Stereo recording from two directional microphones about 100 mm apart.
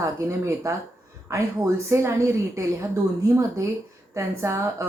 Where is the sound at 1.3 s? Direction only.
30° right (ahead or behind).